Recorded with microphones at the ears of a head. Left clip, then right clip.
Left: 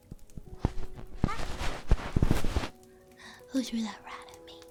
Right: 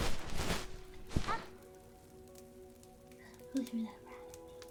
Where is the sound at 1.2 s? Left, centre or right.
Left.